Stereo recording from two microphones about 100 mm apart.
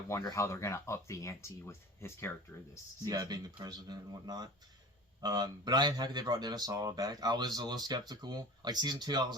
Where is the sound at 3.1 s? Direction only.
40° right (ahead or behind).